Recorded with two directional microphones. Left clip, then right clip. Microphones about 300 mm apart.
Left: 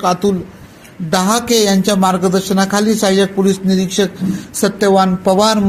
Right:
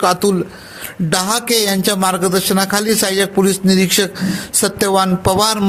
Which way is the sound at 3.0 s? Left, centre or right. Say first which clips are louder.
Left 2 dB; right.